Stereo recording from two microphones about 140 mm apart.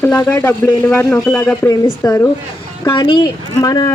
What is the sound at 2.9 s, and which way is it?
Speech, 35° left (ahead or behind).